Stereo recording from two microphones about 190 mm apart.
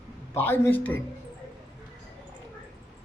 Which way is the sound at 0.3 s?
10° left (ahead or behind).